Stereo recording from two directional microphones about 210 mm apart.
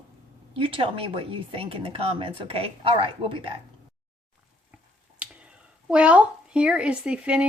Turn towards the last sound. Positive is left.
turn(degrees=-5)  # may be behind; listen again after turning